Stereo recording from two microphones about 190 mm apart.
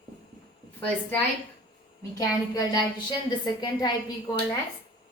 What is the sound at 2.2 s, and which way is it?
A woman's voice, 20° left (ahead or behind).